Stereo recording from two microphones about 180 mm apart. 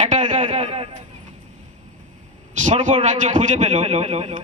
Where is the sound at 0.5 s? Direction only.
30° right (ahead or behind).